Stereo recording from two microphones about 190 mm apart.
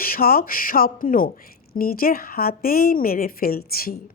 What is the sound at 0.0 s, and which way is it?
A woman's voice, 50° left (ahead or behind).